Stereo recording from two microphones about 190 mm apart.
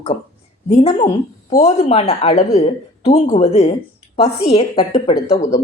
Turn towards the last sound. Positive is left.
turn(degrees=30)  # may be behind; listen again after turning